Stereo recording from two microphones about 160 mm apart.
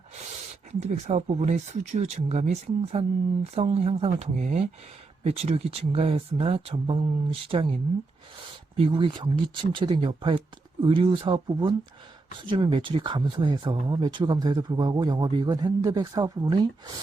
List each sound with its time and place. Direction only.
0.9 s speech: 45° right (ahead or behind)
8.8 s speech: 30° right (ahead or behind)